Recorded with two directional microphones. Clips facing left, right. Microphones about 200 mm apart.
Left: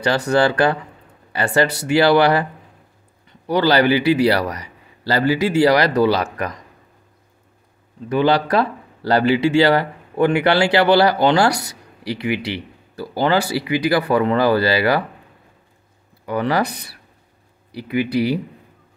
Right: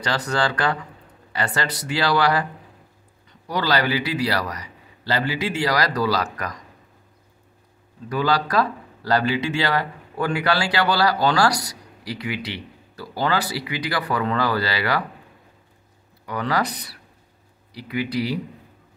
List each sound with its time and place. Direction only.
0.0 s speech: 25° left (ahead or behind)
3.4 s speech: 30° left (ahead or behind)
8.1 s speech: 25° left (ahead or behind)
16.3 s speech: 30° left (ahead or behind)